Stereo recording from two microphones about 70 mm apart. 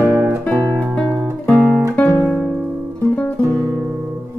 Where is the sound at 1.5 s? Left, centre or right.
Right.